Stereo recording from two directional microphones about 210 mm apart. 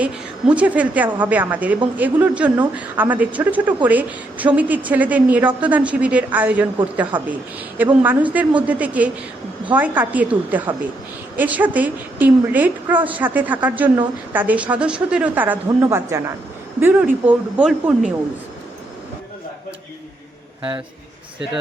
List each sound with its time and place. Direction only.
0.0 s a woman's voice: 5° right (ahead or behind)